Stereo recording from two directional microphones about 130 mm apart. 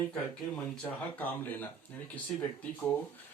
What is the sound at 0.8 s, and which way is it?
Speech, 15° left (ahead or behind).